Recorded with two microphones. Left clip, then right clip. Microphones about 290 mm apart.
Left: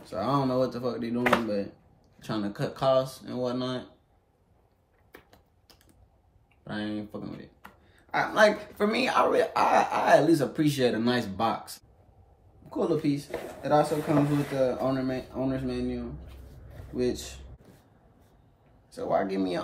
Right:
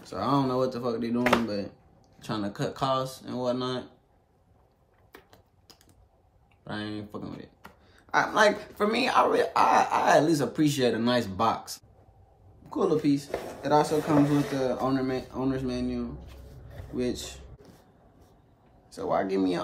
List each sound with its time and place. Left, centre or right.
0.1 s speech: centre
5.1 s a sound: centre
6.6 s speech: centre
18.9 s speech: centre